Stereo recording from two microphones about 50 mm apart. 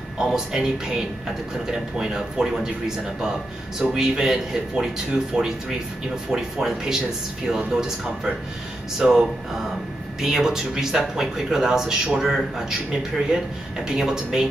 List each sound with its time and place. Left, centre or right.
0.2 s speech: centre
3.9 s speech: centre
13.8 s speech: centre